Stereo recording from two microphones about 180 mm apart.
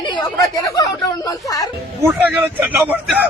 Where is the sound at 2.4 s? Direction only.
10° right (ahead or behind).